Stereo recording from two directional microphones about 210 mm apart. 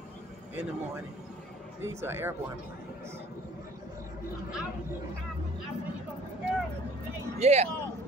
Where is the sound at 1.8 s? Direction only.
10° right (ahead or behind).